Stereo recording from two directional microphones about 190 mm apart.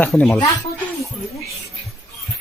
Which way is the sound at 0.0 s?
5° left (ahead or behind).